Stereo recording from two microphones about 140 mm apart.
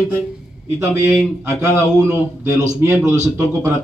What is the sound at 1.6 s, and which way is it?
A man's voice, 20° right (ahead or behind).